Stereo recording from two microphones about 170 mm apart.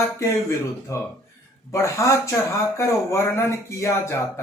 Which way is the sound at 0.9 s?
20° left (ahead or behind).